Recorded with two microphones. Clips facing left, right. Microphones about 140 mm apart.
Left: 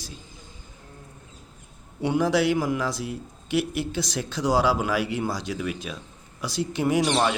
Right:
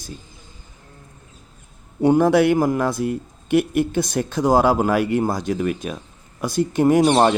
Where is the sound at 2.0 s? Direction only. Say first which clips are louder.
Right 7 dB; 50° right (ahead or behind).